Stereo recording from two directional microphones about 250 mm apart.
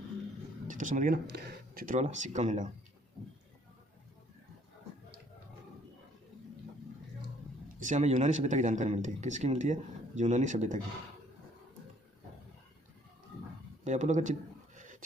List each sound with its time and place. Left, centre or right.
0.7 s speech: right
7.8 s speech: right
13.8 s speech: right